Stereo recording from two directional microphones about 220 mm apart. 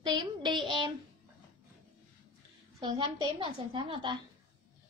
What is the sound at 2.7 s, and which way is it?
A woman's voice, 20° right (ahead or behind).